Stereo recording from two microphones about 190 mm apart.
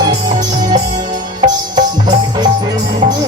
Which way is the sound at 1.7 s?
20° right (ahead or behind).